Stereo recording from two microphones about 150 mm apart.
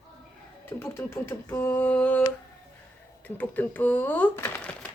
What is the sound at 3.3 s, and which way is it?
Speech, 10° left (ahead or behind).